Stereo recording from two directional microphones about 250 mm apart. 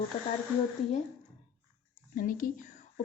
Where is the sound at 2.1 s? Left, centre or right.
Left.